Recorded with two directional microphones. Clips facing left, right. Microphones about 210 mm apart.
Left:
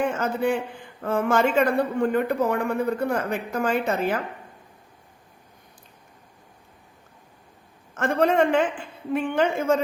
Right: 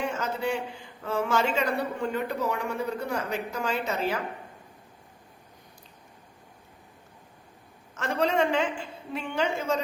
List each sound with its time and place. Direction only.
0.0 s a man's voice: 55° left (ahead or behind)
7.9 s a man's voice: 55° left (ahead or behind)